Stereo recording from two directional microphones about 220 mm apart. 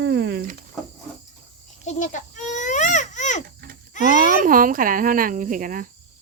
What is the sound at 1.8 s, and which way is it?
Baby cry, 35° left (ahead or behind).